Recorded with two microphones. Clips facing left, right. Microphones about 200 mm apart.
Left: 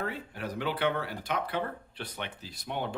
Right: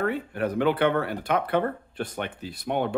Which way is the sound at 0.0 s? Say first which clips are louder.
Right 9 dB; 60° right (ahead or behind).